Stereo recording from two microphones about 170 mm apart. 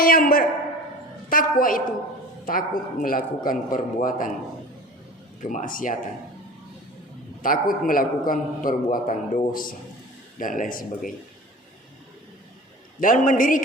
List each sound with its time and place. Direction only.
0.0 s a sound: 60° left (ahead or behind)
1.3 s a man's voice: 55° left (ahead or behind)
5.4 s speech: 45° left (ahead or behind)
7.4 s a man's voice: 55° left (ahead or behind)
13.0 s speech: 50° left (ahead or behind)